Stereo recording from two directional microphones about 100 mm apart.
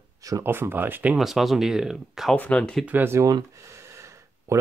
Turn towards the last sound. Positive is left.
turn(degrees=-30)  # may be behind; listen again after turning